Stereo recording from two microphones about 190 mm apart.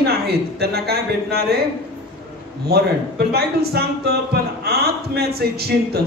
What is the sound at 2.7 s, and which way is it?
Speech, 55° right (ahead or behind).